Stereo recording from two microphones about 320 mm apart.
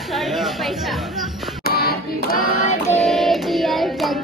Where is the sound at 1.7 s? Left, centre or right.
Left.